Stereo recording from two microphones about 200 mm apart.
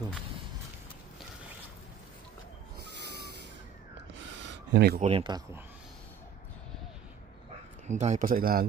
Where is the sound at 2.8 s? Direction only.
55° right (ahead or behind).